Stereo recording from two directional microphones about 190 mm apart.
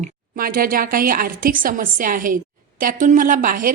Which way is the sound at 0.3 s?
50° right (ahead or behind).